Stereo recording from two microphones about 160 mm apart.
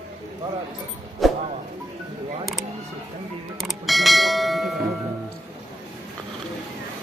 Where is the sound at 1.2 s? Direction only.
Centre (ahead or behind).